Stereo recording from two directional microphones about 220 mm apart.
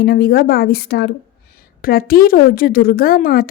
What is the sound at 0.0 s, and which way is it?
A woman's voice, 45° left (ahead or behind).